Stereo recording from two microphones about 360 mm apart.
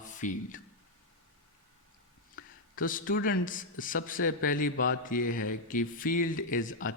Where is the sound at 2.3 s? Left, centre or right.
Left.